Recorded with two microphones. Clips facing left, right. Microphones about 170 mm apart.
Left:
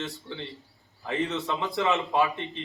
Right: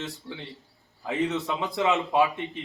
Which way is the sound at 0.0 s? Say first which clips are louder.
Left 1 dB; centre (ahead or behind).